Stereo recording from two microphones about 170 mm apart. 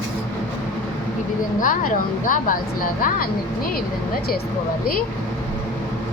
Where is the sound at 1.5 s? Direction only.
50° left (ahead or behind).